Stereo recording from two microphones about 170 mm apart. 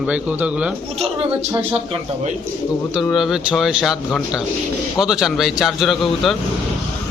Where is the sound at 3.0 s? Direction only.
Centre (ahead or behind).